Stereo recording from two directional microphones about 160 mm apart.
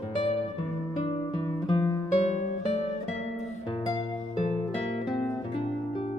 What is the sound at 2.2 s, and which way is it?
Music, 45° left (ahead or behind).